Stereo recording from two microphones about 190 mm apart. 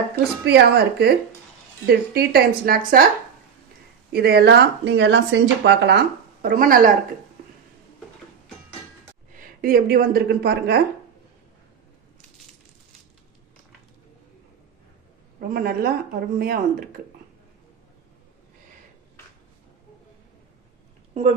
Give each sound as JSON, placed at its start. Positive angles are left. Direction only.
{"t": 0.4, "sound": "speech", "side_deg": -60}
{"t": 4.1, "sound": "speech", "side_deg": -55}
{"t": 6.4, "sound": "speech", "side_deg": -45}
{"t": 9.3, "sound": "a woman's voice", "side_deg": -45}
{"t": 15.4, "sound": "speech", "side_deg": -50}